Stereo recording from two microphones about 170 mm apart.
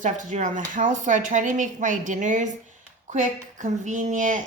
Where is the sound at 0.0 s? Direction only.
50° right (ahead or behind).